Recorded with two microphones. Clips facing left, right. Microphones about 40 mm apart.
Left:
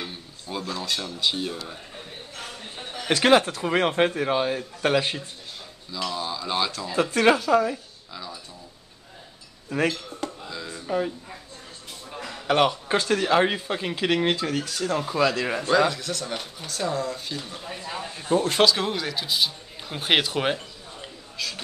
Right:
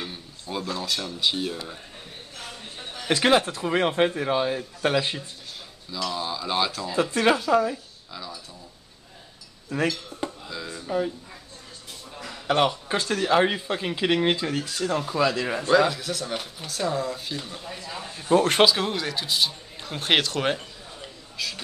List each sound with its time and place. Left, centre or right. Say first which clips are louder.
0.0 s speech: even; centre
3.1 s a man's voice: left 2 dB; centre
9.7 s speech: left 1 dB; centre
10.5 s a sound: even; centre
10.8 s speech: even; centre
12.1 s a sound: left 1 dB; centre
13.0 s a man's voice: even; centre
14.9 s speech: left 1 dB; centre
17.9 s a man's voice: left 2 dB; centre
18.3 s speech: right 3 dB; right
18.8 s speech: even; centre
21.4 s speech: even; centre